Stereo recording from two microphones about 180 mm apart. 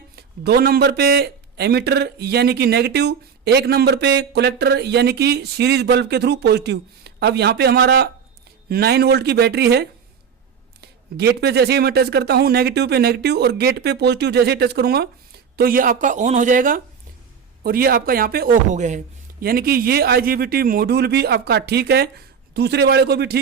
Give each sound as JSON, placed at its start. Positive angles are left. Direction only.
{"t": 0.2, "sound": "a man's voice", "side_deg": -60}
{"t": 19.4, "sound": "a man's voice", "side_deg": -55}